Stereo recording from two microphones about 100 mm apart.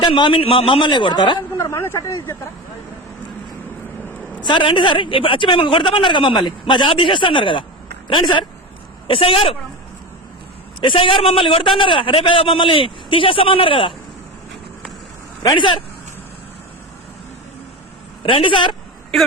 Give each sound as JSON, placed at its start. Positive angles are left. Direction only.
{"t": 0.0, "sound": "a man's voice", "side_deg": 55}
{"t": 1.5, "sound": "speech", "side_deg": 30}
{"t": 4.4, "sound": "a man's voice", "side_deg": 55}
{"t": 9.0, "sound": "a man's voice", "side_deg": 65}
{"t": 10.8, "sound": "a man's voice", "side_deg": 60}
{"t": 15.4, "sound": "speech", "side_deg": 50}
{"t": 18.2, "sound": "a man's voice", "side_deg": 60}